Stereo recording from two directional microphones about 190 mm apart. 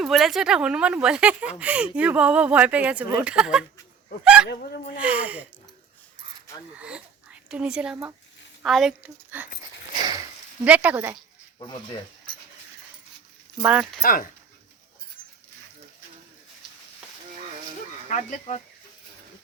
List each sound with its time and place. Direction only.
0.0 s speech: centre (ahead or behind)
4.4 s speech: 55° left (ahead or behind)
4.9 s speech: 5° right (ahead or behind)
6.7 s speech: 5° right (ahead or behind)
10.6 s speech: 10° right (ahead or behind)
13.6 s speech: 5° right (ahead or behind)
14.0 s speech: 45° left (ahead or behind)
18.1 s speech: 40° left (ahead or behind)